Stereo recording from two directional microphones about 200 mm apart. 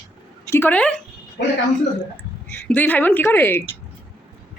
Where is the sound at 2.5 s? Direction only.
10° left (ahead or behind).